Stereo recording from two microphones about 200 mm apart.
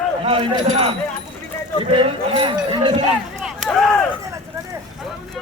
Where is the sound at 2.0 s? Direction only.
25° right (ahead or behind).